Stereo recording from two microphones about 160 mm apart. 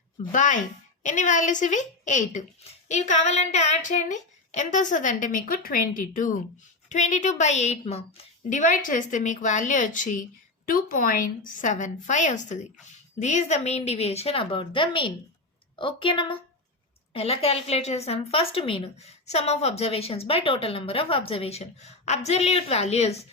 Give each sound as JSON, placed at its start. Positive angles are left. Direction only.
{"t": 0.3, "sound": "speech", "side_deg": 50}
{"t": 6.8, "sound": "a woman's voice", "side_deg": 45}